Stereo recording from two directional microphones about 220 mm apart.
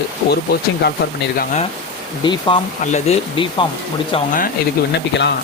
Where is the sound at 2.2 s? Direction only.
20° left (ahead or behind).